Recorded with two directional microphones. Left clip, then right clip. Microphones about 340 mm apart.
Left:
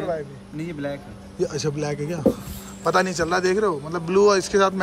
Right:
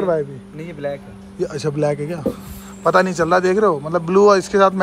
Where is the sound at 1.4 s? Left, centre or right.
Centre.